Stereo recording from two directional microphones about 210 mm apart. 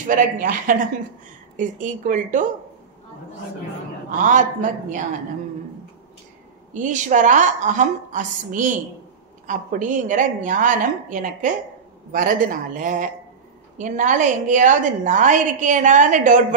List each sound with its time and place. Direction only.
0.0 s a woman's voice: 40° right (ahead or behind)
4.2 s a woman's voice: 35° right (ahead or behind)
6.7 s a woman's voice: 35° right (ahead or behind)